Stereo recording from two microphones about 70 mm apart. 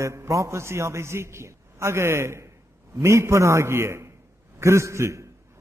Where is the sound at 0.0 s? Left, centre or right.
Right.